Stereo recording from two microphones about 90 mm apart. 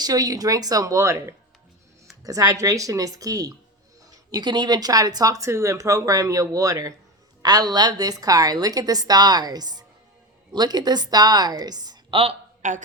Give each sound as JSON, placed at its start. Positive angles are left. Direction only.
{"t": 0.0, "sound": "a woman's voice", "side_deg": -45}
{"t": 5.5, "sound": "a woman's voice", "side_deg": -30}
{"t": 12.1, "sound": "speech", "side_deg": -90}